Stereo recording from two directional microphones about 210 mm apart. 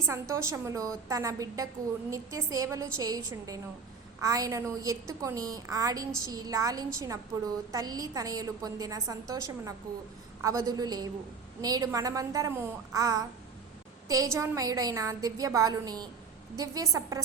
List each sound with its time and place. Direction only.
0.0 s a woman's voice: 15° right (ahead or behind)